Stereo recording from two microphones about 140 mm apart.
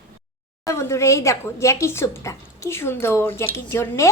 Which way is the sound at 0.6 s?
20° left (ahead or behind).